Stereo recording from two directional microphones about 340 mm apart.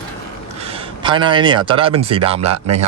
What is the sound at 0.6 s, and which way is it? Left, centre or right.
Speech, centre.